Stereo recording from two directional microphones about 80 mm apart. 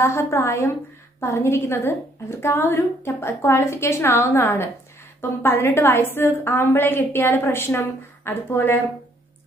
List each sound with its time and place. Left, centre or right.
0.0 s a woman's voice: left